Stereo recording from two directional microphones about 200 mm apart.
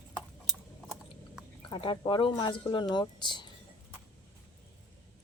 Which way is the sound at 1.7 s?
25° left (ahead or behind).